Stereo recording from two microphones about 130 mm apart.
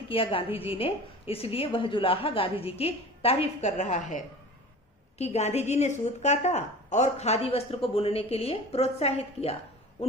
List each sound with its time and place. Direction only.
0.1 s a woman's voice: 40° left (ahead or behind)